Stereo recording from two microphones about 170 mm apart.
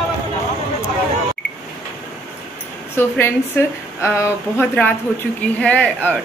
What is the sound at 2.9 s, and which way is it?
A woman's voice, 10° left (ahead or behind).